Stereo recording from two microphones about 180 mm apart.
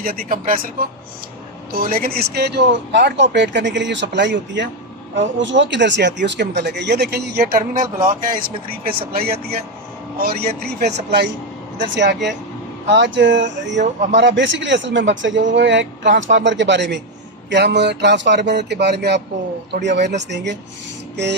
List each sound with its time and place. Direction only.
0.0 s speech: 55° right (ahead or behind)
1.7 s speech: 55° right (ahead or behind)
11.8 s speech: 75° right (ahead or behind)
13.7 s speech: 40° right (ahead or behind)
14.1 s speech: 85° right